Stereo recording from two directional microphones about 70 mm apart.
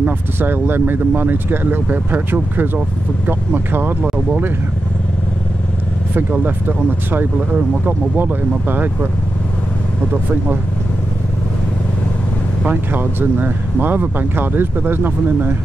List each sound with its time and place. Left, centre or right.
0.0 s speech: right
7.1 s speech: right
12.6 s speech: right